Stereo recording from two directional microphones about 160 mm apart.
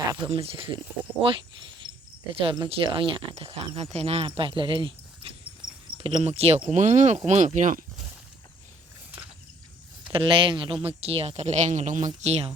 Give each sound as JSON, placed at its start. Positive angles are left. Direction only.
{"t": 0.3, "sound": "speech", "side_deg": -35}
{"t": 6.2, "sound": "speech", "side_deg": -40}
{"t": 10.1, "sound": "speech", "side_deg": -30}